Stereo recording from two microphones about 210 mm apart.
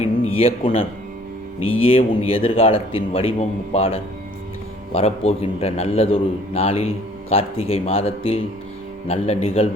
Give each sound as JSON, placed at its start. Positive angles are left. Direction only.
{"t": 0.3, "sound": "a man's voice", "side_deg": 25}
{"t": 1.5, "sound": "speech", "side_deg": 75}
{"t": 1.8, "sound": "a man's voice", "side_deg": 25}